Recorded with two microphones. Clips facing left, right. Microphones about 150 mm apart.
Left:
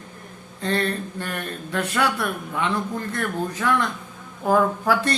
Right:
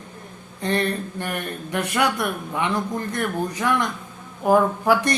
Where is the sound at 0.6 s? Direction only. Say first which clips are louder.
Right 1 dB; 15° right (ahead or behind).